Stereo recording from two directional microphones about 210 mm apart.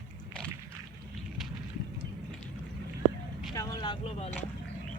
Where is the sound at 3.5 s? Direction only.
20° left (ahead or behind).